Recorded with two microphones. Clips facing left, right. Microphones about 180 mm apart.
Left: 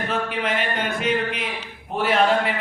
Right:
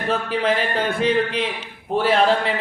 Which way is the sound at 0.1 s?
30° right (ahead or behind).